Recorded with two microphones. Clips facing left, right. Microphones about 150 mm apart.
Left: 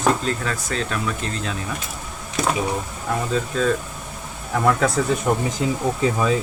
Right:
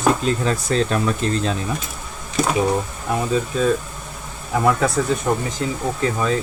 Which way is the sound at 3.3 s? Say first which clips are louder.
Right 2 dB; 10° right (ahead or behind).